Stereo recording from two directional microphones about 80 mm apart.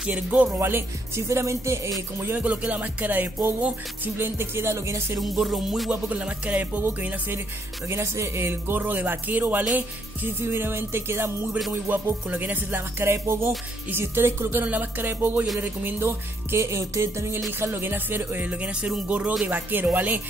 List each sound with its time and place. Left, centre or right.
0.0 s speech: centre; by 1.8 s right
2.0 s music: right
2.3 s speech: centre
3.4 s music: right
5.2 s music: centre
5.9 s speech: centre
7.9 s speech: right
15.6 s music: right
17.5 s speech: right